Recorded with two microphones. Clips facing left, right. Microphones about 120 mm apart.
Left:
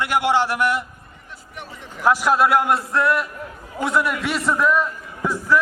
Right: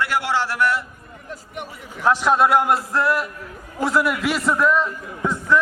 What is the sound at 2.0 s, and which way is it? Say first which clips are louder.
A man's voice: even; 5° left (ahead or behind).